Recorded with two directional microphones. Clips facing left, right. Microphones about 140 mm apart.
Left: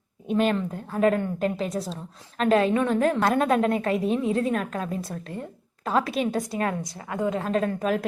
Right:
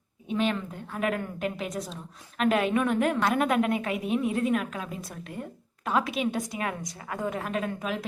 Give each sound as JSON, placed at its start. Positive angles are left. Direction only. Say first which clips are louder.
{"t": 0.3, "sound": "a woman's voice", "louder": "left 5 dB", "side_deg": 45}